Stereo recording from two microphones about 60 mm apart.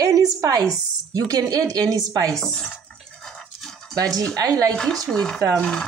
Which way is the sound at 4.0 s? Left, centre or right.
Right.